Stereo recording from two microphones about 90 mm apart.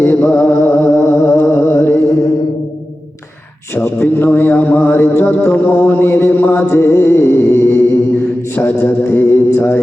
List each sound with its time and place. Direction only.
0.0 s a sound: 25° left (ahead or behind)
1.5 s music: 30° left (ahead or behind)
3.8 s music: 25° left (ahead or behind)
8.5 s a man's voice: 25° left (ahead or behind)